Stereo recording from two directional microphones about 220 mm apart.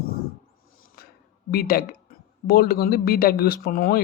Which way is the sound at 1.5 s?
45° left (ahead or behind).